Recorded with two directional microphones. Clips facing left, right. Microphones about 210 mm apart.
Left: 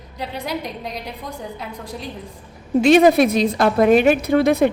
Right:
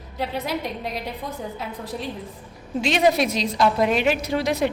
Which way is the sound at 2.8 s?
55° left (ahead or behind).